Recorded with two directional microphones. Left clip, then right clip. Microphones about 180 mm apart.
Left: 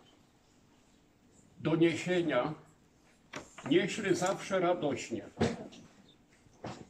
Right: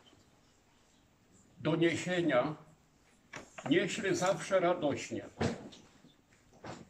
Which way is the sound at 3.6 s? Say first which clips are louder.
Left 2 dB; centre (ahead or behind).